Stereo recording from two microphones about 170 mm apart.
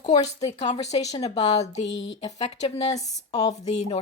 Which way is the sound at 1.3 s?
35° left (ahead or behind).